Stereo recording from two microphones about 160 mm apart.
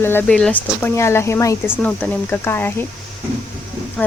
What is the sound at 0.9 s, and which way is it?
Speech, 15° left (ahead or behind).